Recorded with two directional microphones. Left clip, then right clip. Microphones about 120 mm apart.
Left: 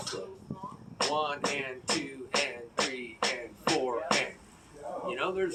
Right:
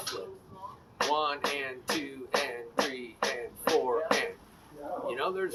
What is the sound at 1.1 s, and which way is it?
Speech, 25° right (ahead or behind).